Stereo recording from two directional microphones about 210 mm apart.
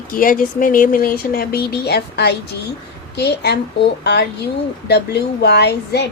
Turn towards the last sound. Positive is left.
turn(degrees=50)  # may be behind; listen again after turning